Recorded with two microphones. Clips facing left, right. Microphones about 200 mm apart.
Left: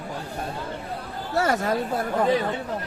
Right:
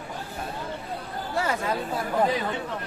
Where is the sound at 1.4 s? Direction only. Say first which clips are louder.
Left 6 dB; 45° left (ahead or behind).